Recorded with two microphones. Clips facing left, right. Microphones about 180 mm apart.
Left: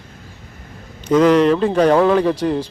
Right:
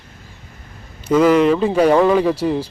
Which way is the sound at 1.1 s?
5° right (ahead or behind).